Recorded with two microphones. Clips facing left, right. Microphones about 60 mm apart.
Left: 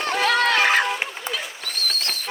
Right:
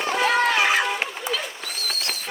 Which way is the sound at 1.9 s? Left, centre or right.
Left.